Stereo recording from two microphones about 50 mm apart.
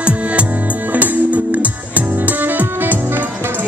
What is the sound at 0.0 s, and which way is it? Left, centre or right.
Music, right.